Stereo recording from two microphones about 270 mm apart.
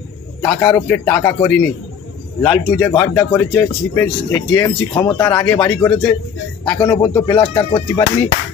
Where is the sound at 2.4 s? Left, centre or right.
Centre.